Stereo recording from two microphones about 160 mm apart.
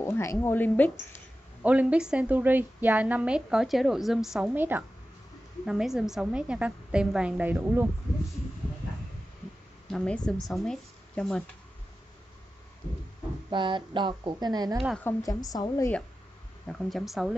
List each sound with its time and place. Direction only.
0.0 s speech: 15° left (ahead or behind)
1.6 s a woman's voice: 10° right (ahead or behind)
9.8 s speech: 5° left (ahead or behind)
13.5 s speech: 30° right (ahead or behind)
15.0 s a woman's voice: 20° left (ahead or behind)
16.9 s speech: centre (ahead or behind)